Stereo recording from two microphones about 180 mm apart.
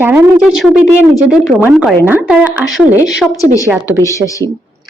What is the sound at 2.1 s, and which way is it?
A woman's voice, 10° right (ahead or behind).